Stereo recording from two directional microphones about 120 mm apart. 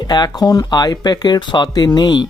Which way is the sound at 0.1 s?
35° left (ahead or behind).